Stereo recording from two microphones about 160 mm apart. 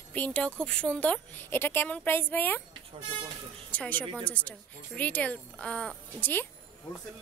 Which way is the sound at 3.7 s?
10° left (ahead or behind).